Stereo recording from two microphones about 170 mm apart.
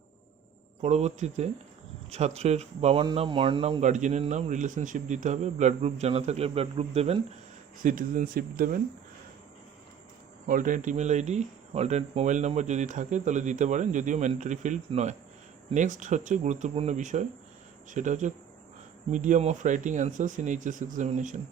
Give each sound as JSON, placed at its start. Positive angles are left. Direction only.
{"t": 0.8, "sound": "speech", "side_deg": -40}
{"t": 7.8, "sound": "speech", "side_deg": -50}
{"t": 10.4, "sound": "speech", "side_deg": -50}